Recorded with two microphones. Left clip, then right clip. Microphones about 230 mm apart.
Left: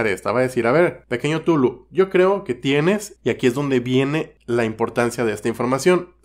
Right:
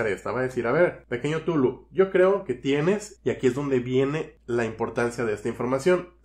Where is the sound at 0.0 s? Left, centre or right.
Left.